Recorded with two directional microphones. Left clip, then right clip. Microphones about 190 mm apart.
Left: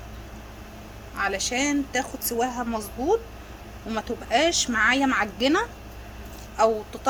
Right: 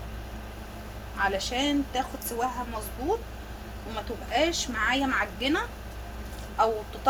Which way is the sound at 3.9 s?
50° left (ahead or behind).